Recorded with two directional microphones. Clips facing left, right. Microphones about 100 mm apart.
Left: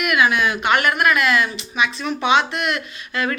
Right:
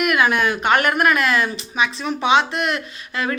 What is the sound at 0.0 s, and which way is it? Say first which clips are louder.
Speech: even; 40° right (ahead or behind).